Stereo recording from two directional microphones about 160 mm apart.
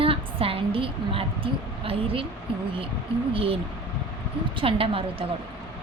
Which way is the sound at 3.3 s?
35° right (ahead or behind).